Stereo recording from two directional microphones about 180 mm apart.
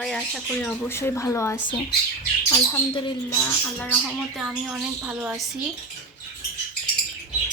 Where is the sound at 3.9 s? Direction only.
5° right (ahead or behind).